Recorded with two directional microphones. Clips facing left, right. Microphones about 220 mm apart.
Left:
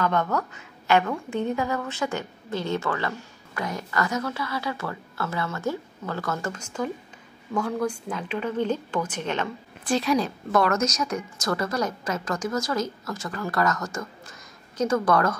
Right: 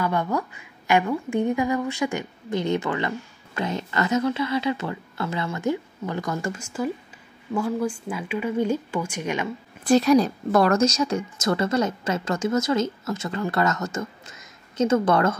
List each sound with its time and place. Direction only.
0.0 s a woman's voice: 10° right (ahead or behind)
9.8 s a woman's voice: 40° right (ahead or behind); by 15.3 s 25° right (ahead or behind)